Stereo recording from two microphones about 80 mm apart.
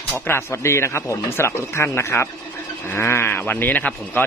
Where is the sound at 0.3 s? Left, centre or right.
Left.